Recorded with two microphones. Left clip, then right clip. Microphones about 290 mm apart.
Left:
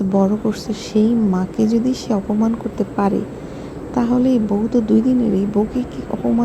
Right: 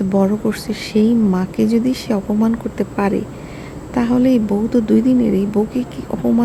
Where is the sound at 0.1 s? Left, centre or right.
Centre.